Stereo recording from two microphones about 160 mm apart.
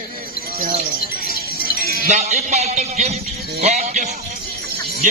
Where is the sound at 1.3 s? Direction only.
70° left (ahead or behind).